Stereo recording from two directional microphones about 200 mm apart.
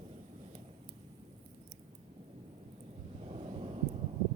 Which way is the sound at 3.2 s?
30° right (ahead or behind).